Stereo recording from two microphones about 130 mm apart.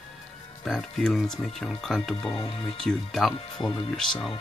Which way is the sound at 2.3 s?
45° left (ahead or behind).